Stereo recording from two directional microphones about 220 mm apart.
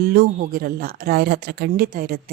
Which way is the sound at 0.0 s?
45° right (ahead or behind).